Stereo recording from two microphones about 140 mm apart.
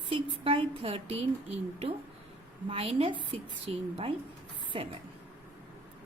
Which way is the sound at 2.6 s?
45° right (ahead or behind).